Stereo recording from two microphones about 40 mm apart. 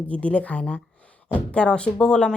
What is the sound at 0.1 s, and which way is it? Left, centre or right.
A woman's voice, left.